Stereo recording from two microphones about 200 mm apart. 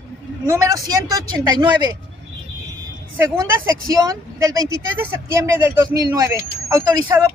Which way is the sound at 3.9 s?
15° right (ahead or behind).